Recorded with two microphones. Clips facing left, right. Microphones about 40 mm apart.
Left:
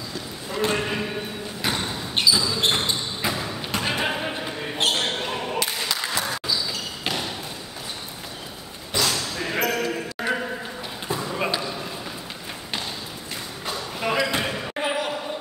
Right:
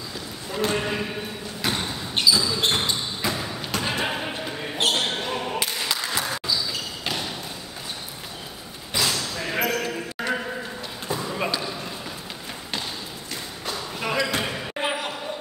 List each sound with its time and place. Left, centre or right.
0.5 s basketball bounce: centre
3.2 s a sound: centre
3.7 s basketball bounce: centre
5.9 s applause: centre
9.1 s a sound: centre
13.7 s basketball bounce: centre
14.8 s basketball bounce: centre